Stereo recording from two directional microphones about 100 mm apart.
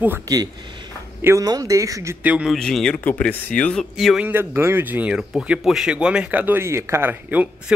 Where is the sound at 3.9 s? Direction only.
5° right (ahead or behind).